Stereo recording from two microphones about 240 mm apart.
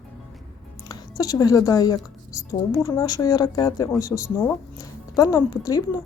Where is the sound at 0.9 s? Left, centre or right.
Centre.